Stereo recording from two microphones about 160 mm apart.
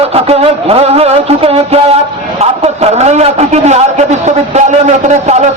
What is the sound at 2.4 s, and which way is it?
A man's voice, 40° right (ahead or behind).